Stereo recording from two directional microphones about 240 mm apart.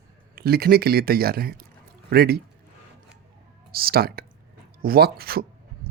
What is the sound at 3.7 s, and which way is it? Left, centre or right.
Speech, right.